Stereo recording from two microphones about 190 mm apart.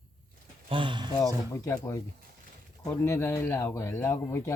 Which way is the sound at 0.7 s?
25° right (ahead or behind).